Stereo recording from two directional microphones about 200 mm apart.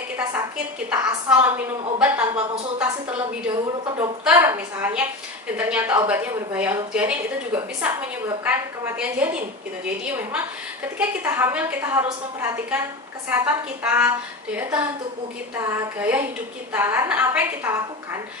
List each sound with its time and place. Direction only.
0.2 s a woman's voice: 10° right (ahead or behind)
3.8 s speech: 25° right (ahead or behind)
4.2 s a woman's voice: 10° right (ahead or behind)